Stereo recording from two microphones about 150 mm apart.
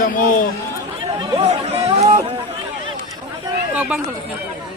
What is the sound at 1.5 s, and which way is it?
Music, 45° right (ahead or behind).